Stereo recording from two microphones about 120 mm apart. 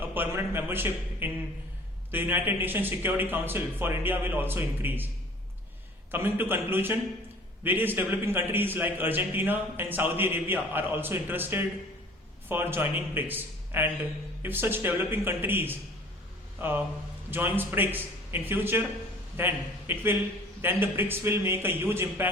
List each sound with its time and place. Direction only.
0.1 s a man's voice: 15° right (ahead or behind)
6.1 s a man's voice: 20° right (ahead or behind)